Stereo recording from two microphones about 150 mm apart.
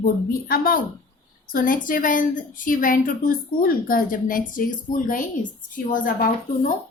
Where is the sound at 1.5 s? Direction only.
65° left (ahead or behind).